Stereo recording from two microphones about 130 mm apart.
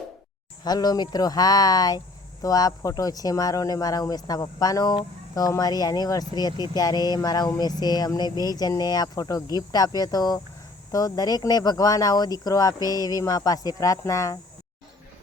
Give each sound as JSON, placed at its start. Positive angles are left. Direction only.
{"t": 0.6, "sound": "speech", "side_deg": 30}